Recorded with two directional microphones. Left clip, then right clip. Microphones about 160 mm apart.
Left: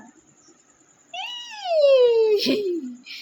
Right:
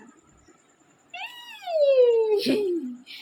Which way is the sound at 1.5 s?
50° left (ahead or behind).